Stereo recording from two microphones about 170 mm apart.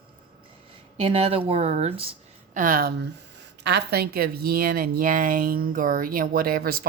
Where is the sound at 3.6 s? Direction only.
75° right (ahead or behind).